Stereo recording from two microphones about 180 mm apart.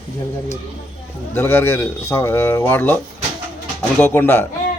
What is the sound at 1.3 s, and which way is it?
Speech, 10° left (ahead or behind).